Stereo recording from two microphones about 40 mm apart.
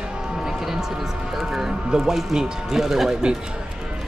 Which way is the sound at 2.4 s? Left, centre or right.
Centre.